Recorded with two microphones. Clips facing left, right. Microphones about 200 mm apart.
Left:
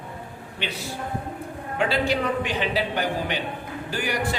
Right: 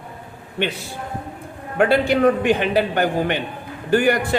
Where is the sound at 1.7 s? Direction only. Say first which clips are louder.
Right 7 dB; 55° right (ahead or behind).